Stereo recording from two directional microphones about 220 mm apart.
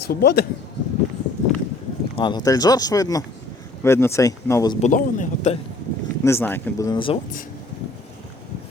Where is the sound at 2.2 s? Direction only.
20° left (ahead or behind).